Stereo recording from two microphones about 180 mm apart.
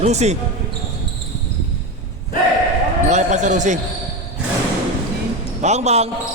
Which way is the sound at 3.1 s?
40° right (ahead or behind).